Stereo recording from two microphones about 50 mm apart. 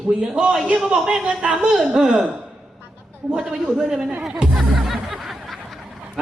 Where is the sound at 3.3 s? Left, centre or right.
Centre.